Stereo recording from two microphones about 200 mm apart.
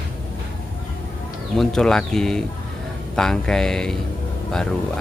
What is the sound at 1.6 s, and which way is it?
Speech, centre (ahead or behind).